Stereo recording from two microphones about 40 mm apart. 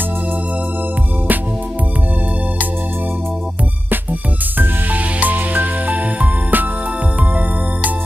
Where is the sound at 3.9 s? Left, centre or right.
Right.